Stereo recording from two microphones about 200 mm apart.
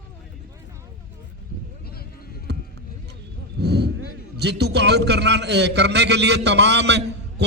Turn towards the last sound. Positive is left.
turn(degrees=-60)  # may be behind; listen again after turning